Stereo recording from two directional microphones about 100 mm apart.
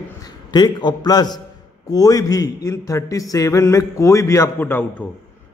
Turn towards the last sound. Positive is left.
turn(degrees=20)  # may be behind; listen again after turning